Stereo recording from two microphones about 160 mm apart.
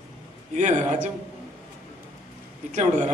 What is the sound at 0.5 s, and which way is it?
Speech, 50° right (ahead or behind).